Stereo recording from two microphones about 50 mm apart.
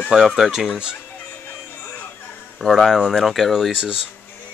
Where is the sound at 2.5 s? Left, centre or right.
Centre.